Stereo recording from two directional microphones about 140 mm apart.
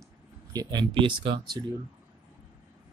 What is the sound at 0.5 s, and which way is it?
Speech, 30° right (ahead or behind).